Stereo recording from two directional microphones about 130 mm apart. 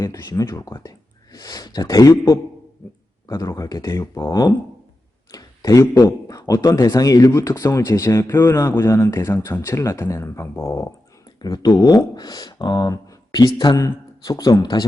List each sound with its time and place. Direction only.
0.0 s speech: 25° left (ahead or behind)
5.3 s a sound: 30° left (ahead or behind)
5.8 s speech: 25° left (ahead or behind)